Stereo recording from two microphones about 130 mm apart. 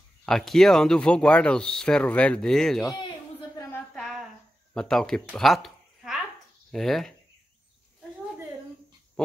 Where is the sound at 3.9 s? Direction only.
5° left (ahead or behind).